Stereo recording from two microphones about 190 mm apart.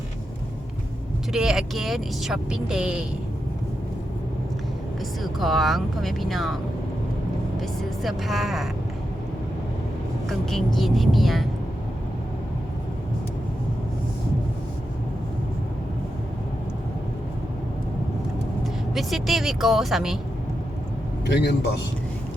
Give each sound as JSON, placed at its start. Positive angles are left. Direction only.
{"t": 1.3, "sound": "speech", "side_deg": -5}
{"t": 5.2, "sound": "speech", "side_deg": 0}
{"t": 7.6, "sound": "speech", "side_deg": 0}
{"t": 10.2, "sound": "speech", "side_deg": 0}
{"t": 18.6, "sound": "speech", "side_deg": 0}
{"t": 21.2, "sound": "a man's voice", "side_deg": 65}